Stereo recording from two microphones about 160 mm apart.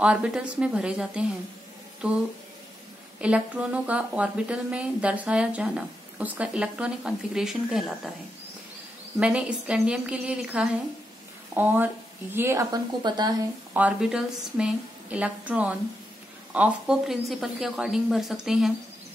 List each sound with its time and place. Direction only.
0.0 s speech: 5° right (ahead or behind)
9.2 s a woman's voice: 5° right (ahead or behind); by 13.4 s 25° right (ahead or behind)
13.7 s a woman's voice: 5° right (ahead or behind)